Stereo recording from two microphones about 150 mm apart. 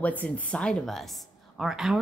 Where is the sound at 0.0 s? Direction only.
10° left (ahead or behind).